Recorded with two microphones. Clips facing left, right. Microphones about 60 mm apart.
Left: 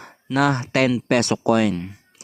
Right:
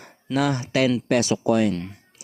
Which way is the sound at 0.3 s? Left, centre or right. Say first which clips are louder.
Left 3 dB; left.